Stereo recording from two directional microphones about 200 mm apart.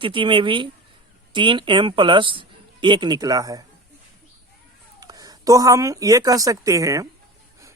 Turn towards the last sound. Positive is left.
turn(degrees=-15)  # may be behind; listen again after turning